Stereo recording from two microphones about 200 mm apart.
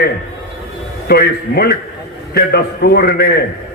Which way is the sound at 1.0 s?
50° left (ahead or behind).